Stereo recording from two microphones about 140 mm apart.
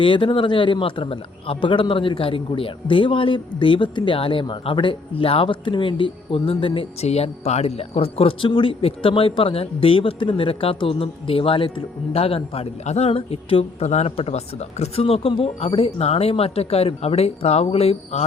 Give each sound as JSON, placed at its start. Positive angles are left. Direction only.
{"t": 0.0, "sound": "a man's voice", "side_deg": 40}